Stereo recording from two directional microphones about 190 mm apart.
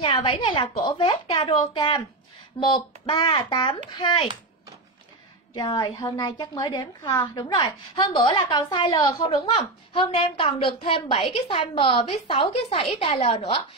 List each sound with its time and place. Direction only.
0.0 s a woman's voice: 25° left (ahead or behind)
5.5 s a woman's voice: 25° left (ahead or behind)